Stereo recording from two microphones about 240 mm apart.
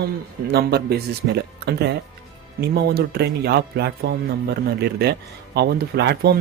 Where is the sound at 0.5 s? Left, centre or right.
Right.